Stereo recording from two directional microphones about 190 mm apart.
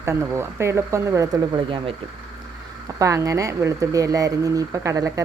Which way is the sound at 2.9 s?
15° right (ahead or behind).